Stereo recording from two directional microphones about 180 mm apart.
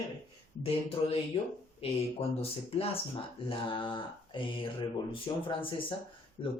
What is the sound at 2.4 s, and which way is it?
Speech, 35° left (ahead or behind).